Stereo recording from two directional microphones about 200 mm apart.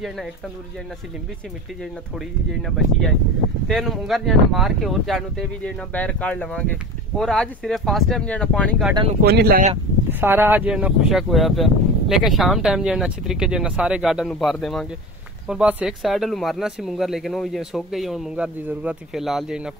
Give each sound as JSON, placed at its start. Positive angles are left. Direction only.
{"t": 1.8, "sound": "speech", "side_deg": 0}
{"t": 9.2, "sound": "speech", "side_deg": -50}
{"t": 10.2, "sound": "speech", "side_deg": -10}